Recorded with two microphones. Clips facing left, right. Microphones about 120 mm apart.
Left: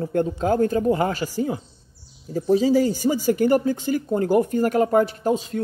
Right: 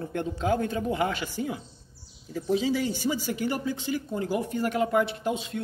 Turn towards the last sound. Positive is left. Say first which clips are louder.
# left 7 dB
turn(degrees=40)  # may be behind; listen again after turning